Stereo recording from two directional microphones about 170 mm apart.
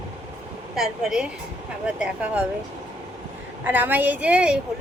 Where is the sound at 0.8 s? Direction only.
5° right (ahead or behind).